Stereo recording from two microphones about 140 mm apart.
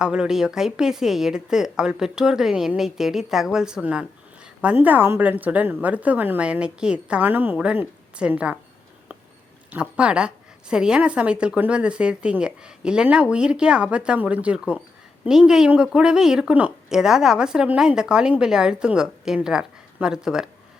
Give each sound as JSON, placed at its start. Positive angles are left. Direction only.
{"t": 0.0, "sound": "a woman's voice", "side_deg": -5}
{"t": 10.0, "sound": "a woman's voice", "side_deg": -10}